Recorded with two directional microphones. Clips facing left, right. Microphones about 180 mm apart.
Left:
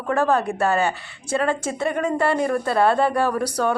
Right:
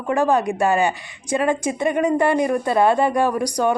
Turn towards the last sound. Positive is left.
turn(degrees=-15)  # may be behind; listen again after turning